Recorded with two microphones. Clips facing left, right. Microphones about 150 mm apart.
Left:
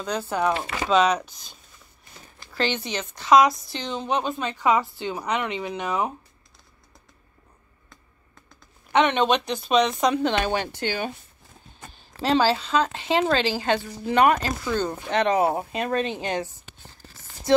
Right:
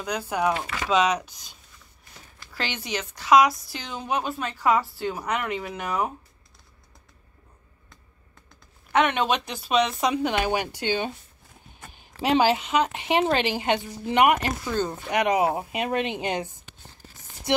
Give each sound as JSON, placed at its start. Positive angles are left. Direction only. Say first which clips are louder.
{"t": 0.0, "sound": "speech", "louder": "left 1 dB", "side_deg": -10}
{"t": 0.6, "sound": "speech", "louder": "left 2 dB", "side_deg": 25}
{"t": 0.8, "sound": "speech", "louder": "left 2 dB", "side_deg": -10}
{"t": 2.5, "sound": "speech", "louder": "left 4 dB", "side_deg": -10}
{"t": 4.6, "sound": "a woman's voice", "louder": "even", "side_deg": 20}
{"t": 8.9, "sound": "speech", "louder": "left 2 dB", "side_deg": -5}